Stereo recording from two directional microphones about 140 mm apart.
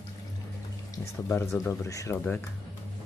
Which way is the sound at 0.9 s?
20° left (ahead or behind).